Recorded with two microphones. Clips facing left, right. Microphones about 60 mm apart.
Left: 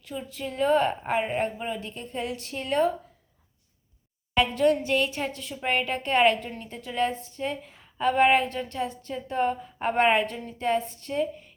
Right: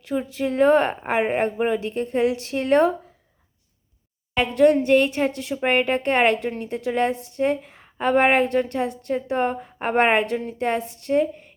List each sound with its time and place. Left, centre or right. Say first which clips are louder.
0.2 s a woman's voice: right 8 dB; right
4.5 s a woman's voice: right 10 dB; right
5.3 s a woman's voice: right 9 dB; right
5.5 s a woman's voice: right 6 dB; right
7.9 s a woman's voice: right 2 dB; right